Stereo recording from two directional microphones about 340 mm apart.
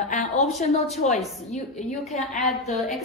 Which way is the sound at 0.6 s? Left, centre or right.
Centre.